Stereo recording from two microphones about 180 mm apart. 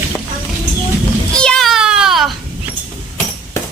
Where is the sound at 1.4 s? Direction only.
5° left (ahead or behind).